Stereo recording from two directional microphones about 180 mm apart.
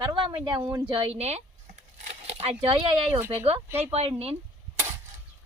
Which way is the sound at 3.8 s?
35° right (ahead or behind).